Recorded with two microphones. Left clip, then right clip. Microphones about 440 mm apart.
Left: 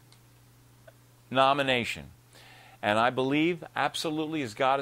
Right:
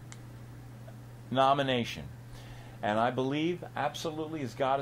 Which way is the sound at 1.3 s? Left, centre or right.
Left.